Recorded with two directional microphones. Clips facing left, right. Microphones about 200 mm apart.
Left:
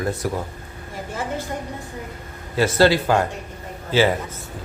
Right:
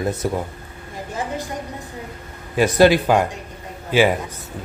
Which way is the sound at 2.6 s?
15° right (ahead or behind).